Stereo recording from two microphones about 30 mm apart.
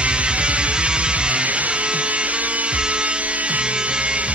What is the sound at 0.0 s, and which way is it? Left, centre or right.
Music, right.